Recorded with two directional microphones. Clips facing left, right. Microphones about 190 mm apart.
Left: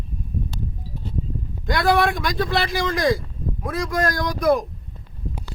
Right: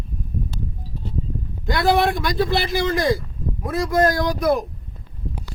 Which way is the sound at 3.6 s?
25° right (ahead or behind).